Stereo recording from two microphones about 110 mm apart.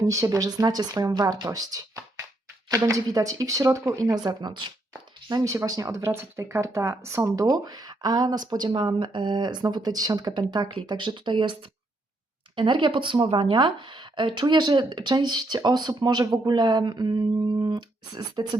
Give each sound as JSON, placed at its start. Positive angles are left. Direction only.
{"t": 0.0, "sound": "speech", "side_deg": -30}
{"t": 12.5, "sound": "speech", "side_deg": -45}